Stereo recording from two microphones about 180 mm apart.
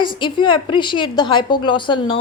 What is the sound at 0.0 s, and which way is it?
A woman's voice, 25° left (ahead or behind).